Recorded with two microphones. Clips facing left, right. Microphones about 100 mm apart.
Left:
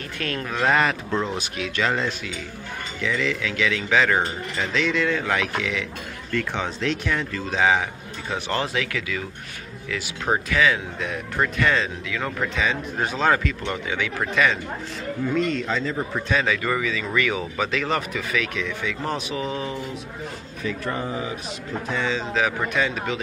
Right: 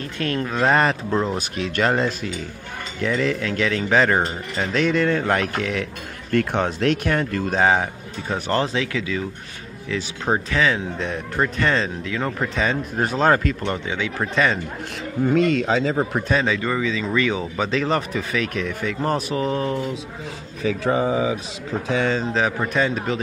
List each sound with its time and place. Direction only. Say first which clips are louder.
0.2 s speech: right 3 dB; 25° right (ahead or behind)
1.1 s speech: right 3 dB; 5° right (ahead or behind)
1.6 s speech: right 4 dB; 45° right (ahead or behind); by 9.2 s 30° right (ahead or behind)
10.5 s speech: even; 30° right (ahead or behind)
13.8 s speech: right 1 dB; 25° right (ahead or behind)
15.2 s speech: right 6 dB; 80° right
16.3 s speech: right 2 dB; 30° right (ahead or behind); by 19.8 s 45° right (ahead or behind)
20.6 s speech: right 7 dB; 90° right
22.7 s speech: right 3 dB; 35° right (ahead or behind)